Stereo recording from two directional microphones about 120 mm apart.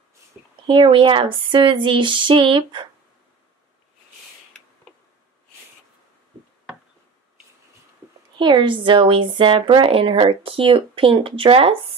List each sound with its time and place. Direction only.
0.3 s speech: centre (ahead or behind)
0.7 s a woman's voice: 45° right (ahead or behind)
8.4 s a woman's voice: 40° right (ahead or behind)